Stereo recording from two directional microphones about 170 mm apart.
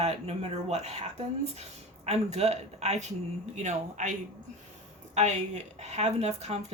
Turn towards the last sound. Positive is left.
turn(degrees=-40)  # may be behind; listen again after turning